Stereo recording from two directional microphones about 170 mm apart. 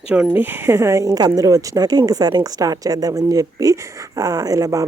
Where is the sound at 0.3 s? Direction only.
10° right (ahead or behind).